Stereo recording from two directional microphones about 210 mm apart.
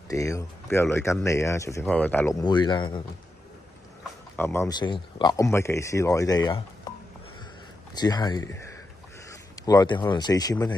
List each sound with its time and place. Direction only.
0.1 s speech: 15° left (ahead or behind)
2.4 s speech: 20° left (ahead or behind)
4.4 s speech: 10° left (ahead or behind)
7.9 s speech: 20° left (ahead or behind)
9.7 s speech: 20° left (ahead or behind)